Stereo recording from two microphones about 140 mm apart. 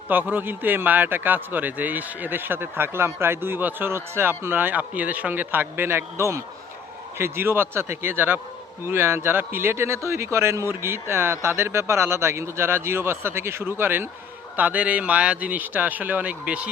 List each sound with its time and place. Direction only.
0.1 s a man's voice: 15° right (ahead or behind)